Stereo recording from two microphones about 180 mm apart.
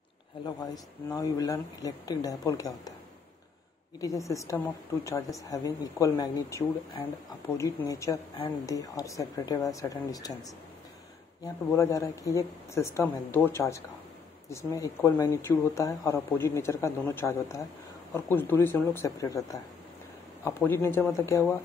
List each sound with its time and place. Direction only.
1.1 s speech: 20° left (ahead or behind)
4.0 s speech: 20° left (ahead or behind)